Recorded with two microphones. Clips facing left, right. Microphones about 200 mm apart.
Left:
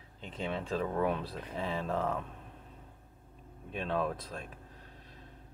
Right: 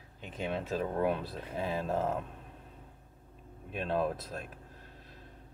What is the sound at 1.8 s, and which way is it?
Speech, 5° right (ahead or behind).